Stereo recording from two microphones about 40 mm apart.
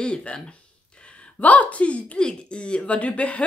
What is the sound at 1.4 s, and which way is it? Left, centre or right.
Speech, left.